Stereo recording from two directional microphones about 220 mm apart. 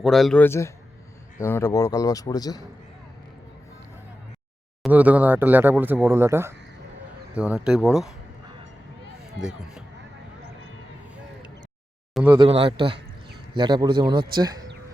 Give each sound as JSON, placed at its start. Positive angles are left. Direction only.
{"t": 0.0, "sound": "speech", "side_deg": 0}
{"t": 4.8, "sound": "speech", "side_deg": -5}
{"t": 9.4, "sound": "speech", "side_deg": 0}
{"t": 12.1, "sound": "a sound", "side_deg": -5}
{"t": 12.4, "sound": "a man's voice", "side_deg": -25}